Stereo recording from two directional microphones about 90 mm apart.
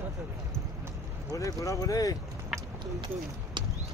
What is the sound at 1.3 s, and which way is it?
Speech, 35° left (ahead or behind).